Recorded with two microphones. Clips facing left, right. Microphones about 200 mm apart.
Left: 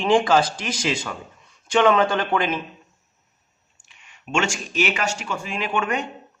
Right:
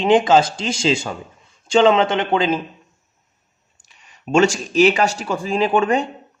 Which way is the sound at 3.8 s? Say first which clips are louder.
Right 7 dB; 35° right (ahead or behind).